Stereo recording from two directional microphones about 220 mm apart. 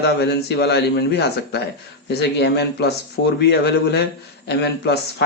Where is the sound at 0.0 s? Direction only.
50° left (ahead or behind).